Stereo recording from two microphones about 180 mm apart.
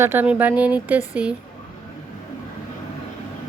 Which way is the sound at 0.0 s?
10° right (ahead or behind).